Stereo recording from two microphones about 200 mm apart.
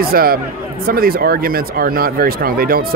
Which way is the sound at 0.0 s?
50° right (ahead or behind).